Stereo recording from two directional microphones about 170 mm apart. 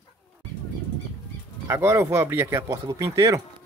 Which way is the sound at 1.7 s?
15° right (ahead or behind).